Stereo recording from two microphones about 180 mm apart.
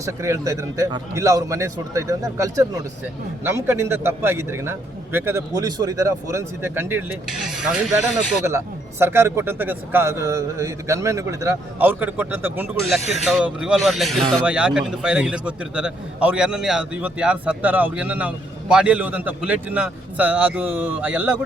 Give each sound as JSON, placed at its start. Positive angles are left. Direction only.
{"t": 0.0, "sound": "a man's voice", "side_deg": -15}
{"t": 7.3, "sound": "speech", "side_deg": 0}
{"t": 8.4, "sound": "a man's voice", "side_deg": -15}